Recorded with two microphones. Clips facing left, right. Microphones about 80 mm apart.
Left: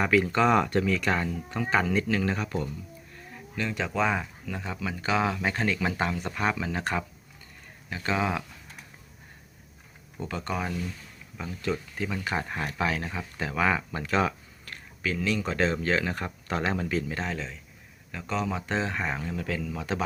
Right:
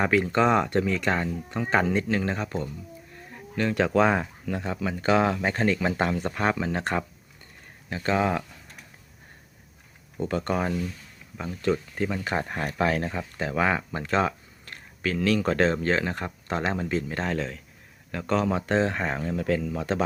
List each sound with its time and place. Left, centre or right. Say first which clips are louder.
0.0 s speech: right 1 dB; right
3.3 s a sound: right 6 dB; right
3.8 s speech: right 4 dB; right
10.2 s speech: right 5 dB; right
11.3 s speech: right 5 dB; right
15.0 s speech: right 5 dB; right
15.7 s speech: right 2 dB; right
17.0 s speech: right 4 dB; right